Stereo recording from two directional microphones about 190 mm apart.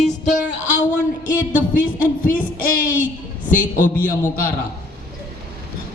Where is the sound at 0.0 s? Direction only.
40° left (ahead or behind).